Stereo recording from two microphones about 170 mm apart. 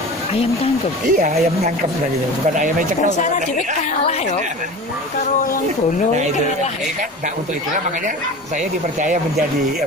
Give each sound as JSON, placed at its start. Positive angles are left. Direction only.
{"t": 1.1, "sound": "speech", "side_deg": -55}